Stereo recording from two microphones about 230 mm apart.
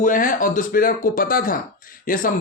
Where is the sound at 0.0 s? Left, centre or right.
Left.